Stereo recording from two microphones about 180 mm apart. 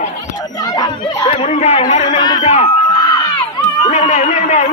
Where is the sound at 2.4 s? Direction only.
35° left (ahead or behind).